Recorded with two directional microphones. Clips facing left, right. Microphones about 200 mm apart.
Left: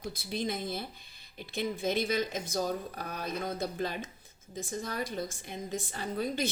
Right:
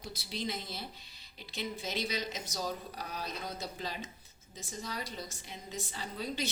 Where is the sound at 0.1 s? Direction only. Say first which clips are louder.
Left 4 dB; 50° left (ahead or behind).